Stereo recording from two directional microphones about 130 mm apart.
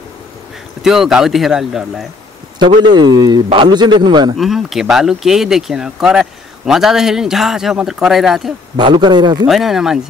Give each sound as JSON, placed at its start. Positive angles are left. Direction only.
{"t": 0.8, "sound": "speech", "side_deg": -5}
{"t": 2.8, "sound": "a man's voice", "side_deg": -35}
{"t": 4.4, "sound": "speech", "side_deg": 0}
{"t": 8.7, "sound": "a man's voice", "side_deg": -35}
{"t": 9.5, "sound": "speech", "side_deg": -5}